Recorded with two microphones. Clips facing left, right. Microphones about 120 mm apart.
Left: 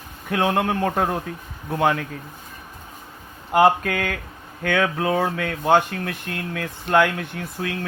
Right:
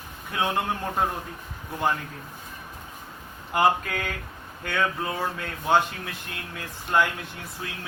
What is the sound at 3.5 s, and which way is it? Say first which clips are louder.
Speech: left 6 dB; 60° left (ahead or behind).